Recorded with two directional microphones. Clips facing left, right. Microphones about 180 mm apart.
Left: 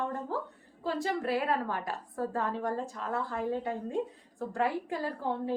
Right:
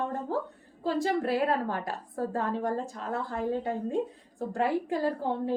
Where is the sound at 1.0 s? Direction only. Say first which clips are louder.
Right 3 dB; 35° right (ahead or behind).